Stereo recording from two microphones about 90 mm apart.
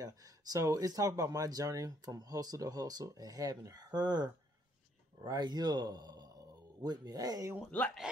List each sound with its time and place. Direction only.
0.0 s speech: 40° right (ahead or behind)